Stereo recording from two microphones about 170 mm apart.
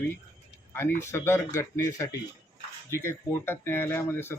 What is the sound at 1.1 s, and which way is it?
A man's voice, 15° left (ahead or behind).